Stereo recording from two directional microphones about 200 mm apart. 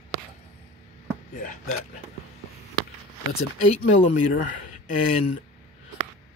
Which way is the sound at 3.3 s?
90° left.